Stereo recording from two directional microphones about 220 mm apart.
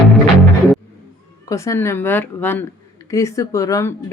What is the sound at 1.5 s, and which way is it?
Speech, 15° left (ahead or behind).